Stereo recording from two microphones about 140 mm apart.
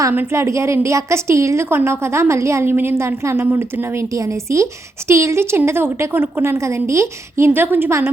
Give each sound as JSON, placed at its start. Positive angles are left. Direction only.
{"t": 0.0, "sound": "a woman's voice", "side_deg": -15}